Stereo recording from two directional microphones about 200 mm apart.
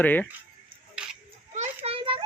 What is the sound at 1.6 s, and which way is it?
Children playing, 30° right (ahead or behind).